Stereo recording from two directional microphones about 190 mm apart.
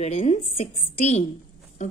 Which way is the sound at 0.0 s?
35° left (ahead or behind).